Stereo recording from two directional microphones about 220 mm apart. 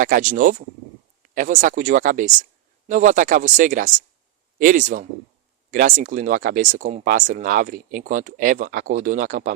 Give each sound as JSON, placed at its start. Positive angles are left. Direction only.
{"t": 0.0, "sound": "speech", "side_deg": -35}